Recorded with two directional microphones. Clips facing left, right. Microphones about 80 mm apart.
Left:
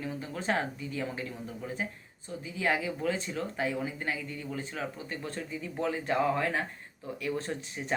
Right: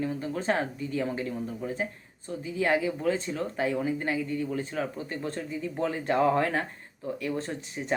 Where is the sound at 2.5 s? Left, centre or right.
Right.